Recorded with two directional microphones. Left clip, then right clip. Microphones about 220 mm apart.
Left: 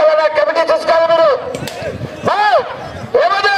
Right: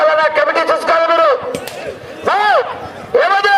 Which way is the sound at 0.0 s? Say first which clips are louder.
Left 1 dB; 20° right (ahead or behind).